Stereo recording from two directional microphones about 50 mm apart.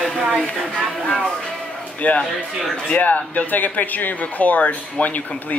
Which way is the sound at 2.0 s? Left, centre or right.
Left.